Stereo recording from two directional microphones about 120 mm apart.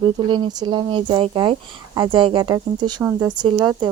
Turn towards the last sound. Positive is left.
turn(degrees=-40)  # may be behind; listen again after turning